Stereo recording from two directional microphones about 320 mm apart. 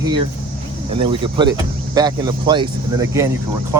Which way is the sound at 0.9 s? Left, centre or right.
Centre.